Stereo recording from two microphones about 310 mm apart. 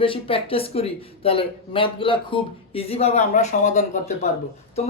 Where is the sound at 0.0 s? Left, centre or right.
Centre.